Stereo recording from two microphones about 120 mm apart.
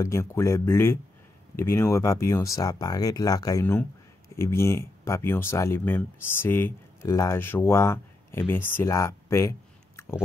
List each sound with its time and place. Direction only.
0.0 s speech: 25° left (ahead or behind)